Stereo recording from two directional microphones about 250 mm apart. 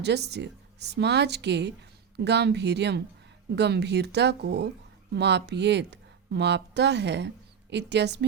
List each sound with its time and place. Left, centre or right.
0.0 s speech: right